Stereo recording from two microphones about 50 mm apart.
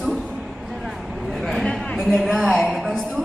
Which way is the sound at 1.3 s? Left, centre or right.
Centre.